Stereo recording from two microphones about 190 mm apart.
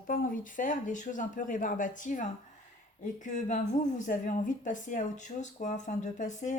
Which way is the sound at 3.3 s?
40° left (ahead or behind).